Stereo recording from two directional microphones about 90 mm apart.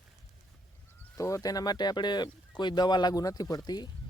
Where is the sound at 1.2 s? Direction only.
35° left (ahead or behind).